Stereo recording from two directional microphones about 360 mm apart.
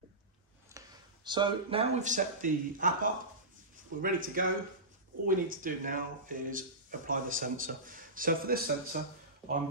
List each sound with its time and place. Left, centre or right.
0.7 s speech: centre